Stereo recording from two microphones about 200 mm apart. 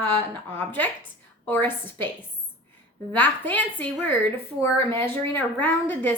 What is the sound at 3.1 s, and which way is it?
A woman's voice, 10° left (ahead or behind).